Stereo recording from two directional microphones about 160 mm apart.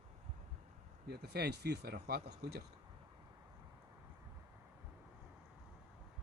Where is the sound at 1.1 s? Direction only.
90° right.